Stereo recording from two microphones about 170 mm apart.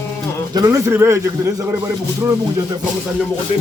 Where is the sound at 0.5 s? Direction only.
20° right (ahead or behind).